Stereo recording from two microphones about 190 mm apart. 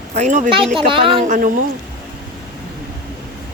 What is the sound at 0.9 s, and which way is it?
Speech, 25° right (ahead or behind).